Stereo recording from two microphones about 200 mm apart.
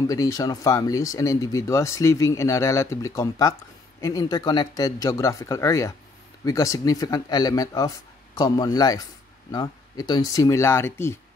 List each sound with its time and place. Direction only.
0.0 s speech: 15° left (ahead or behind)